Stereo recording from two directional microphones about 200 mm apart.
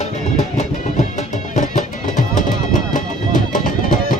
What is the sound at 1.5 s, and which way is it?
Music, 40° left (ahead or behind).